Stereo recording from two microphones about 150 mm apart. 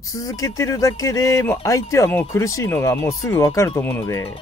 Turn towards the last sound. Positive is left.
turn(degrees=15)  # may be behind; listen again after turning